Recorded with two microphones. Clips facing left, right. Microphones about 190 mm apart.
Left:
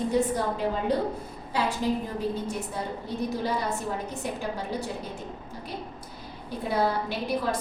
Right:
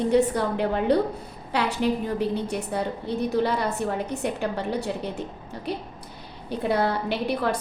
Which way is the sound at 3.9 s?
65° right (ahead or behind).